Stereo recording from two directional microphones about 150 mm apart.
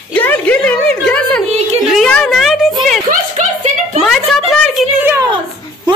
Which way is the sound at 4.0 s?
Centre (ahead or behind).